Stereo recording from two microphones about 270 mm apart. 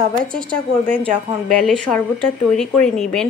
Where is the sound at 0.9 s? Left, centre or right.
Right.